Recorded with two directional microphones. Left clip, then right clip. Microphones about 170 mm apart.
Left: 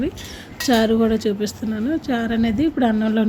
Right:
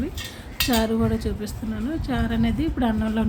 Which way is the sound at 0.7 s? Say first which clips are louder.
Left 7 dB; 20° left (ahead or behind).